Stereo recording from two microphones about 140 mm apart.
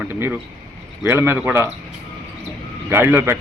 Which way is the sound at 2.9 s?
15° right (ahead or behind).